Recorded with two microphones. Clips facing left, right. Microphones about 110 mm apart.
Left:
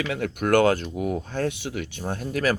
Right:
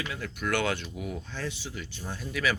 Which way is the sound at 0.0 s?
70° left (ahead or behind).